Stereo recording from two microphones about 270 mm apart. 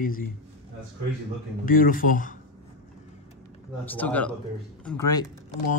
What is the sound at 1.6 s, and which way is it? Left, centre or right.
Speech, left.